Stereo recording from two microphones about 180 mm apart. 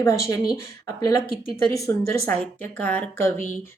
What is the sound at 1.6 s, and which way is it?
A woman's voice, 15° left (ahead or behind).